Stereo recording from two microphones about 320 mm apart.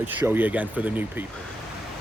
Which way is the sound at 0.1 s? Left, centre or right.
Centre.